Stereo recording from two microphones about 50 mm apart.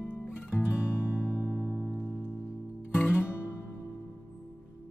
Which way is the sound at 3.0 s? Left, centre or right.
Left.